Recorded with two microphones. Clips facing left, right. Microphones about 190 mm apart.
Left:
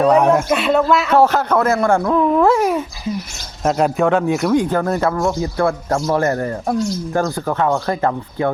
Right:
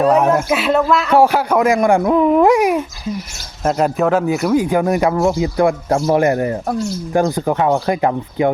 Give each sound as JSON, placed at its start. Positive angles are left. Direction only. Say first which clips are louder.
{"t": 0.0, "sound": "speech", "louder": "even", "side_deg": 0}
{"t": 1.1, "sound": "speech", "louder": "right 2 dB", "side_deg": -10}
{"t": 3.6, "sound": "speech", "louder": "even", "side_deg": 0}